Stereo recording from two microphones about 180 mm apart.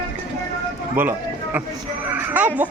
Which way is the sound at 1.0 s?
10° right (ahead or behind).